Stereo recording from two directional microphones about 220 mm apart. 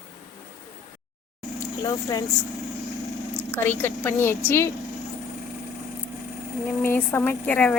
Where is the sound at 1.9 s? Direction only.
15° left (ahead or behind).